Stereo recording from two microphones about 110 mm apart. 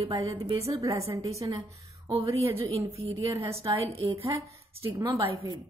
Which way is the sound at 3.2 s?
30° right (ahead or behind).